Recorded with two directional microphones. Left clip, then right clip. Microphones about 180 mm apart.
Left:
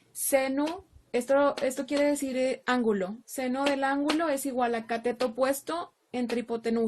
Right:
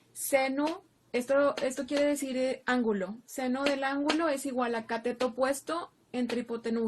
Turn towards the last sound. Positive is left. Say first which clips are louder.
# left 3 dB
turn(degrees=45)  # may be behind; listen again after turning